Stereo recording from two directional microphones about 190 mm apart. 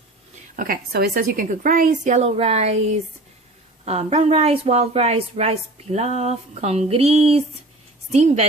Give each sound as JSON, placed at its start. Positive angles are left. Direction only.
{"t": 0.5, "sound": "a woman's voice", "side_deg": -50}